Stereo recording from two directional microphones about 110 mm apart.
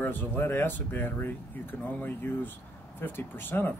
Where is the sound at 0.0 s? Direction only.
20° left (ahead or behind).